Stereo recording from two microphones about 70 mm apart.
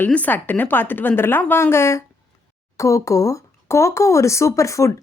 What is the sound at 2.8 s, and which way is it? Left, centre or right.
Speech, left.